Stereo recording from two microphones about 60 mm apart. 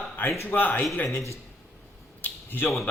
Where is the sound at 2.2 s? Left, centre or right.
Left.